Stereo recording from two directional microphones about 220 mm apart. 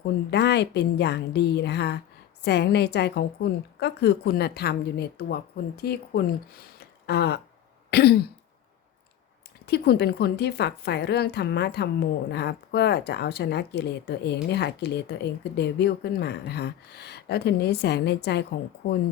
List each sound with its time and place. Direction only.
0.3 s a woman's voice: 50° left (ahead or behind)
6.7 s a sound: 45° left (ahead or behind)
7.9 s throat clearing: 45° left (ahead or behind)
9.6 s a woman's voice: 45° left (ahead or behind)